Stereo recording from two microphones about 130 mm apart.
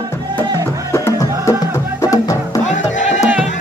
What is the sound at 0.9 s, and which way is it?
Music, 20° left (ahead or behind).